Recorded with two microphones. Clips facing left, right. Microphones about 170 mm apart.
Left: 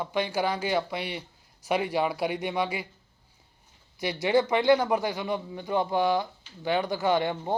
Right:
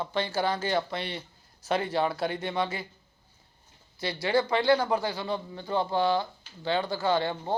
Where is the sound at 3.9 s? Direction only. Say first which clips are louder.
Left 2 dB; 15° left (ahead or behind).